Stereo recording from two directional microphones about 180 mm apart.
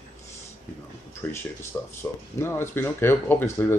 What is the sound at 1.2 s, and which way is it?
Speech, 15° left (ahead or behind).